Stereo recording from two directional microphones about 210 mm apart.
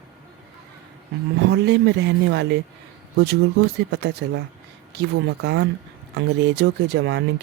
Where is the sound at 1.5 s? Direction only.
50° right (ahead or behind).